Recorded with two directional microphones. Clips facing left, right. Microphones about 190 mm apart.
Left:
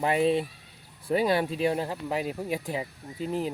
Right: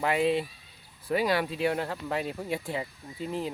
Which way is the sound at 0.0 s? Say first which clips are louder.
Left 2 dB; 20° left (ahead or behind).